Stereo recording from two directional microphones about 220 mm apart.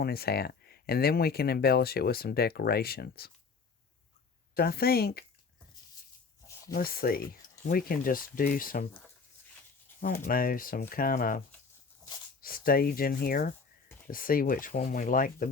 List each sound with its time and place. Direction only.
0.0 s speech: 45° left (ahead or behind)
4.5 s speech: 45° left (ahead or behind)
6.7 s speech: 40° left (ahead or behind)
10.0 s speech: 40° left (ahead or behind)